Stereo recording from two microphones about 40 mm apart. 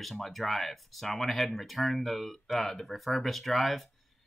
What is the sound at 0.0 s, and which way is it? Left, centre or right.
Speech, centre.